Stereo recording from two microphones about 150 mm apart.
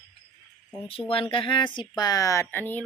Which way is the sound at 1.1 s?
35° left (ahead or behind).